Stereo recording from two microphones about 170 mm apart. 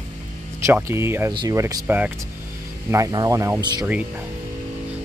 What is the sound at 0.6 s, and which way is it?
Speech, 15° right (ahead or behind).